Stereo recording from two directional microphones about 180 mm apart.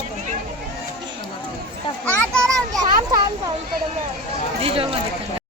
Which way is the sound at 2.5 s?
20° right (ahead or behind).